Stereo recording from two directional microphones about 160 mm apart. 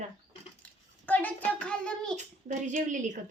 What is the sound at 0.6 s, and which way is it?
A child's voice, 10° left (ahead or behind).